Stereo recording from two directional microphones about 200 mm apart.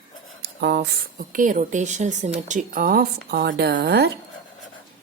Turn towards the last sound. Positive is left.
turn(degrees=-55)  # may be behind; listen again after turning